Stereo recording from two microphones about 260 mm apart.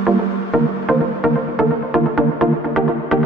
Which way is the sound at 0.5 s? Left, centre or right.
Centre.